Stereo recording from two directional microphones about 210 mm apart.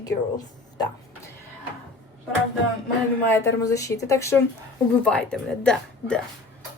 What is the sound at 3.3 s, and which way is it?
A woman's voice, 15° left (ahead or behind).